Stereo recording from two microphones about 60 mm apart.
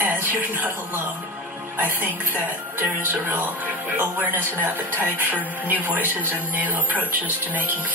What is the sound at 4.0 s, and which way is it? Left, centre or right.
Speech, right.